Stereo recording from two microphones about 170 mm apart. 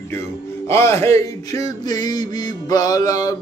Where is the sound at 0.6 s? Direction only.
15° left (ahead or behind).